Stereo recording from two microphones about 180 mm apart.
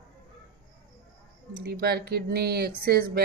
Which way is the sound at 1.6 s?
60° right (ahead or behind).